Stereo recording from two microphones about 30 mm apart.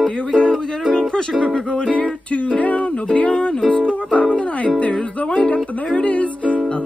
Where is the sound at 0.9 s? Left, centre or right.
Left.